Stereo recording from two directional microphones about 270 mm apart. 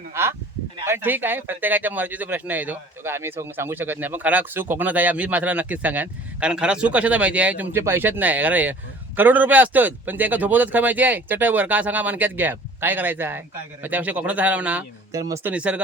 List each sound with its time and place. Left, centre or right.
0.1 s speech: centre